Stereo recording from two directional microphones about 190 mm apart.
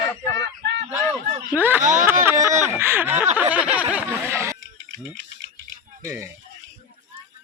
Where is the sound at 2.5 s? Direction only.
40° right (ahead or behind).